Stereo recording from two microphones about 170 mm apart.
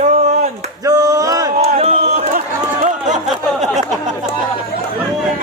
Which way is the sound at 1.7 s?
35° right (ahead or behind).